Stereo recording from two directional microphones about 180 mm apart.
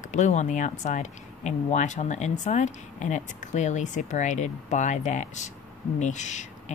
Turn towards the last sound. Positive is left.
turn(degrees=40)  # may be behind; listen again after turning